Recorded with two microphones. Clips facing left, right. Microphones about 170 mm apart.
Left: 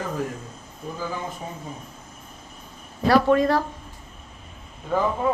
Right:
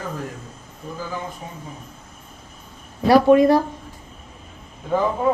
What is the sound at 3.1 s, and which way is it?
Speech, 15° right (ahead or behind).